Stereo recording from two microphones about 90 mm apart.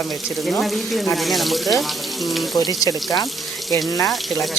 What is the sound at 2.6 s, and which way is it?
Speech, 45° left (ahead or behind).